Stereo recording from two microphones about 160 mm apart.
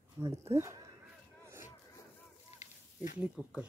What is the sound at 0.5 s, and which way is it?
Speech, 15° right (ahead or behind).